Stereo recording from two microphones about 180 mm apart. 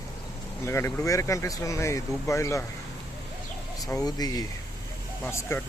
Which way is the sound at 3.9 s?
20° left (ahead or behind).